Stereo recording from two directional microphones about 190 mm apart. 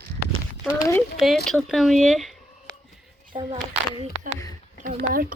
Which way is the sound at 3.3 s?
20° right (ahead or behind).